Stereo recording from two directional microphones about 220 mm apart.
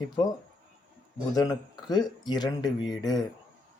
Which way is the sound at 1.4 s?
20° left (ahead or behind).